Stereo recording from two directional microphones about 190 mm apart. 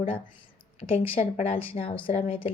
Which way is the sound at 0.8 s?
30° left (ahead or behind).